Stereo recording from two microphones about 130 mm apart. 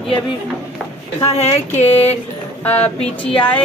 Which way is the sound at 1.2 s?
55° left (ahead or behind).